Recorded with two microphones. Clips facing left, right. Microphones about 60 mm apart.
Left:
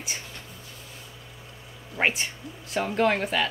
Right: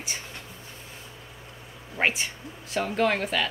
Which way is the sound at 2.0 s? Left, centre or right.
Centre.